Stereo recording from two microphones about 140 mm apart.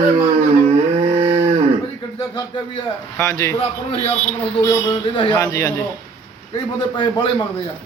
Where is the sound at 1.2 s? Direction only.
50° right (ahead or behind).